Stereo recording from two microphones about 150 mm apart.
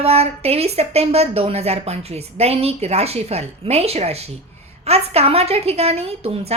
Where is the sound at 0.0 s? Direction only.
45° right (ahead or behind).